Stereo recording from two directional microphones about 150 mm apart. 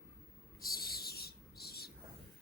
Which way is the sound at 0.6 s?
85° left.